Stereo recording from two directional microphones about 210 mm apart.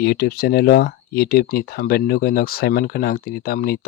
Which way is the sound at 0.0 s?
50° left (ahead or behind).